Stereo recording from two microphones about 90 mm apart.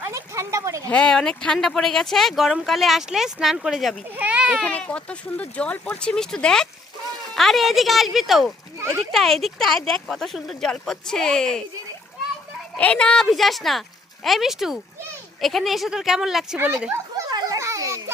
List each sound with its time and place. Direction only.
0.0 s a sound: 35° right (ahead or behind)
0.9 s speech: 10° left (ahead or behind)
4.2 s a child's voice: 15° right (ahead or behind)
4.5 s speech: 10° left (ahead or behind)
12.7 s speech: 15° left (ahead or behind)
13.3 s speech: centre (ahead or behind)
16.9 s a sound: 35° right (ahead or behind)
17.3 s children playing: 40° right (ahead or behind)